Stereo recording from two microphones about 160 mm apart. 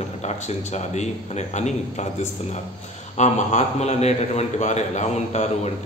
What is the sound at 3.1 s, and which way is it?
A man's voice, 45° left (ahead or behind).